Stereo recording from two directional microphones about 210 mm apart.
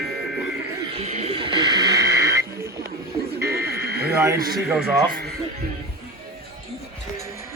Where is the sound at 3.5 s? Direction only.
50° right (ahead or behind).